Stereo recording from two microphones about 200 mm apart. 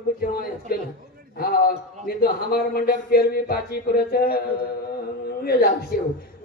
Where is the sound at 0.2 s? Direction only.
50° left (ahead or behind).